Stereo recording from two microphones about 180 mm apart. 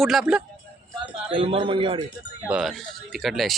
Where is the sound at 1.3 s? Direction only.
30° right (ahead or behind).